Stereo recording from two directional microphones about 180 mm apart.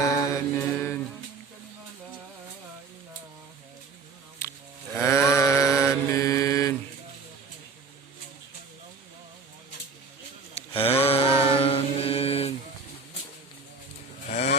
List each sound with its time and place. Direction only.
0.0 s mantra: 15° left (ahead or behind)
4.9 s sheep: 15° left (ahead or behind)
6.1 s mantra: 15° left (ahead or behind)
10.5 s a sound: 35° left (ahead or behind)
11.4 s mantra: 30° left (ahead or behind)